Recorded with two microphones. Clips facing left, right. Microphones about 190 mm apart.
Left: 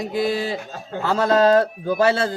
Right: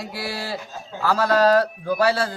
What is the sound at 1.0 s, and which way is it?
Speech, 25° left (ahead or behind).